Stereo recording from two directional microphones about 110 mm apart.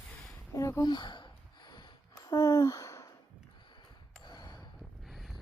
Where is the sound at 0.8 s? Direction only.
45° left (ahead or behind).